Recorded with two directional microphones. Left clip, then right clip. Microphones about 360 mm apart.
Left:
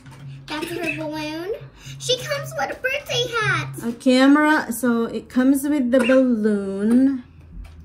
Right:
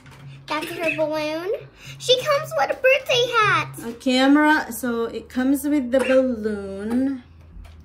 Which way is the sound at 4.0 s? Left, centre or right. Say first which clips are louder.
Left 2 dB; centre.